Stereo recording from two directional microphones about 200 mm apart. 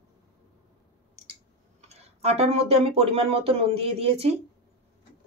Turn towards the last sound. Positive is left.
turn(degrees=-30)  # may be behind; listen again after turning